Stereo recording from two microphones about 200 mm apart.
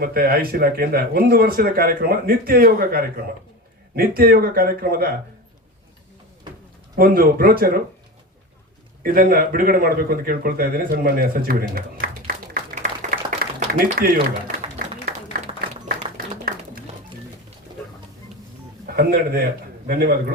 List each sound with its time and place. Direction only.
0.0 s a man's voice: 50° right (ahead or behind)
6.9 s a man's voice: 45° right (ahead or behind)
9.0 s a man's voice: 45° right (ahead or behind)
12.8 s a sound: 45° right (ahead or behind)
15.0 s applause: 45° right (ahead or behind)
18.9 s a man's voice: 50° right (ahead or behind)